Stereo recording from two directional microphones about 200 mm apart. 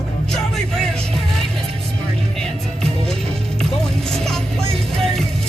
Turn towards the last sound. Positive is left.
turn(degrees=0)  # may be behind; listen again after turning